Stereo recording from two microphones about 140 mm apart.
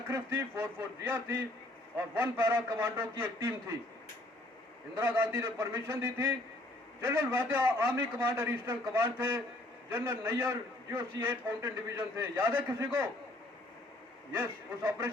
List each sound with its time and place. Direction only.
0.1 s a man's voice: 15° right (ahead or behind)
4.9 s a man's voice: 15° right (ahead or behind)
14.3 s a man's voice: 15° right (ahead or behind)